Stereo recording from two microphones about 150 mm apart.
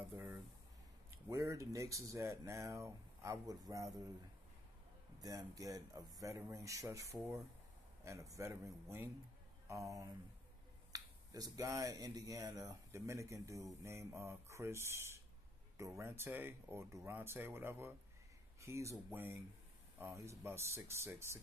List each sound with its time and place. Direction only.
0.1 s speech: 15° right (ahead or behind)
5.2 s speech: 25° right (ahead or behind)